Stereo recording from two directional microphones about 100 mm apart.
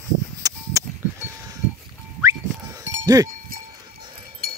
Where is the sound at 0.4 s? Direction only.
35° right (ahead or behind).